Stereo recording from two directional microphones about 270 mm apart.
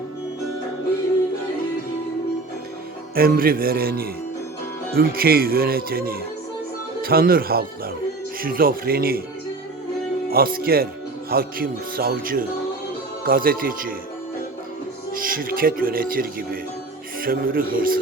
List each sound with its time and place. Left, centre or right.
3.2 s speech: right
10.2 s speech: right
15.1 s speech: right